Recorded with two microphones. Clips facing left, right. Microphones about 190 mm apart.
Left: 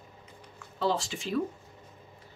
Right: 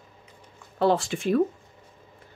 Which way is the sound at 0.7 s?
55° right (ahead or behind).